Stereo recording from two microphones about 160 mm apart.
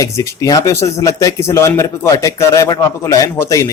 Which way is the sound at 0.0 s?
20° left (ahead or behind).